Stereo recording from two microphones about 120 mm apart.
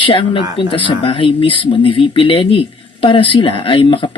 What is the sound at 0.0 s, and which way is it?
Speech, 45° left (ahead or behind).